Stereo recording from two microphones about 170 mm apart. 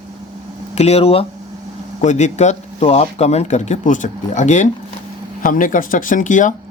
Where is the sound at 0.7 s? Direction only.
40° left (ahead or behind).